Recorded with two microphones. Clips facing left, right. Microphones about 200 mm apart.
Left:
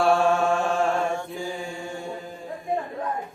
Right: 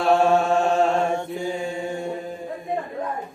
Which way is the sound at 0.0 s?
20° right (ahead or behind).